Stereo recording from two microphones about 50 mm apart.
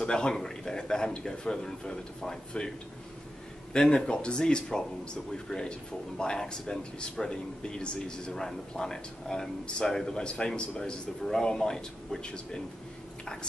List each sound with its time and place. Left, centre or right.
0.0 s speech: centre
3.7 s speech: centre